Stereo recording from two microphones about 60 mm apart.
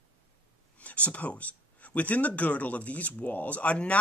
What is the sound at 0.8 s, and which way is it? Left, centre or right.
Speech, left.